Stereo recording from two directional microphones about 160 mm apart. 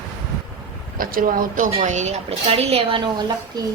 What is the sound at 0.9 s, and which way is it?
A woman's voice, 60° right (ahead or behind).